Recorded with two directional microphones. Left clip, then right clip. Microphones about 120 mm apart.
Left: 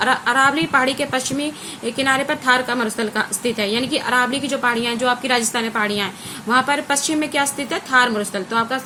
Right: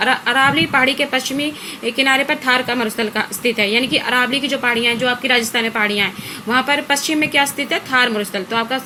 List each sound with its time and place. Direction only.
0.0 s a woman's voice: 20° right (ahead or behind)